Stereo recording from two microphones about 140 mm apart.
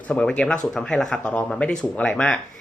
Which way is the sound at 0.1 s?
10° left (ahead or behind).